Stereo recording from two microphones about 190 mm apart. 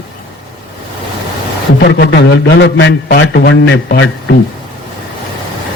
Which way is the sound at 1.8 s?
60° left (ahead or behind).